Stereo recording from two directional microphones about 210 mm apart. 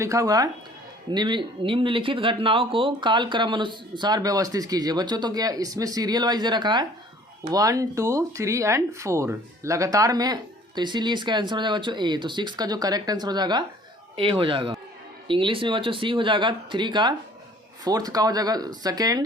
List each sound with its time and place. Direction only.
0.0 s speech: 15° right (ahead or behind)